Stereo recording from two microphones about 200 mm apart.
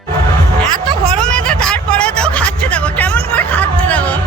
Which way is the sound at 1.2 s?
5° left (ahead or behind).